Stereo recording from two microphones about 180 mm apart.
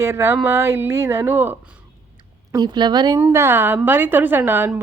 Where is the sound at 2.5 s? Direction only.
25° right (ahead or behind).